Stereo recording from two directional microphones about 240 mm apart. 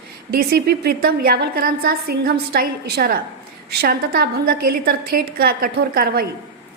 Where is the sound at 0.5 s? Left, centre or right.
Right.